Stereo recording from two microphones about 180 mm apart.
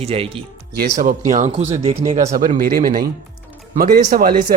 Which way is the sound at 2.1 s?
45° right (ahead or behind).